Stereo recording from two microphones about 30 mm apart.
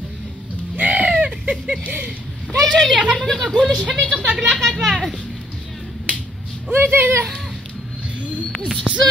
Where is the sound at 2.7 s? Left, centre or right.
Centre.